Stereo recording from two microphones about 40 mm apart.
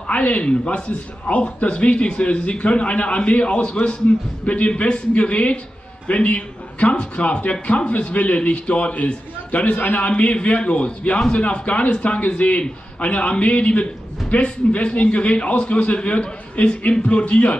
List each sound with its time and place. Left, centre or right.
0.0 s a man's voice: left